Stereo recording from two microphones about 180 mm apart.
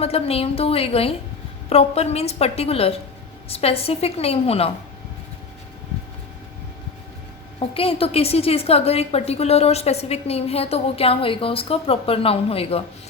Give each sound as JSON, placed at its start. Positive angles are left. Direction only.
{"t": 0.0, "sound": "a woman's voice", "side_deg": 35}
{"t": 7.7, "sound": "a woman's voice", "side_deg": 30}